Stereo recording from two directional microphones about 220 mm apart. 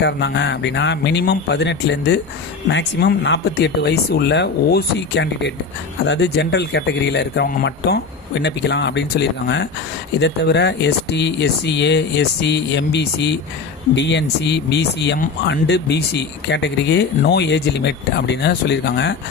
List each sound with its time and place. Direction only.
0.0 s speech: 50° left (ahead or behind)